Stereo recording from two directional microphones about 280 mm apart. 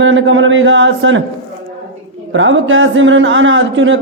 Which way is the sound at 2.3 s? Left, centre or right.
Right.